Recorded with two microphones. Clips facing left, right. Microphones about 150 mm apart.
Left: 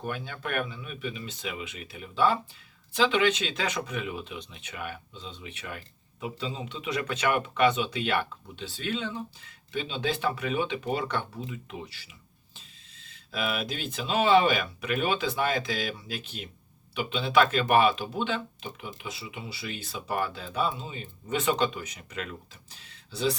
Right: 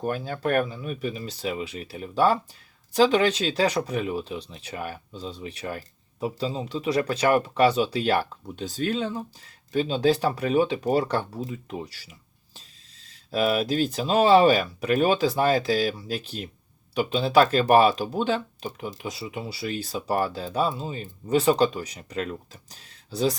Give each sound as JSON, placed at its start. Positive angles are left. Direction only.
{"t": 0.0, "sound": "speech", "side_deg": -40}